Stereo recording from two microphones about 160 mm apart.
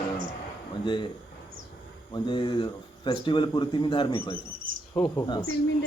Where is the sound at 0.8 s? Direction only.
30° left (ahead or behind).